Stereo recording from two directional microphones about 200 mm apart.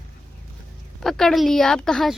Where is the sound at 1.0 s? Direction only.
Centre (ahead or behind).